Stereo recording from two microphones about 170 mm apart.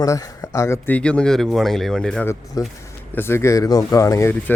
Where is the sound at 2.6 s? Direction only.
20° left (ahead or behind).